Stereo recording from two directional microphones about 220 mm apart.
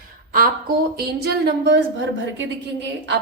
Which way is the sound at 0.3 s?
40° right (ahead or behind).